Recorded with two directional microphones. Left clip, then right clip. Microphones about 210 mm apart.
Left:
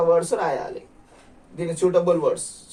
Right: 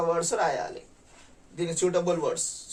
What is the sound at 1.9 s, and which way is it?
Speech, 20° right (ahead or behind).